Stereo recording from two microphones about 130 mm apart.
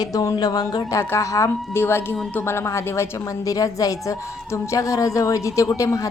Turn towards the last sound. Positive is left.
turn(degrees=25)  # may be behind; listen again after turning